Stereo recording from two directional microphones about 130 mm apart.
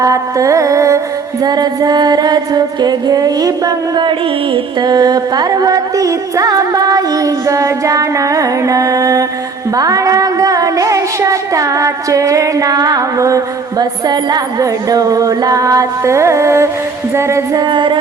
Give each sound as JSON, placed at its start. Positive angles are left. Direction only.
{"t": 0.0, "sound": "music", "side_deg": -25}
{"t": 17.6, "sound": "music", "side_deg": -40}